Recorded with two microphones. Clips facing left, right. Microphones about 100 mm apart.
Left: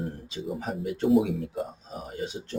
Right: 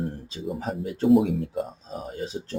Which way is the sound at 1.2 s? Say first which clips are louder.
Right 3 dB; 45° right (ahead or behind).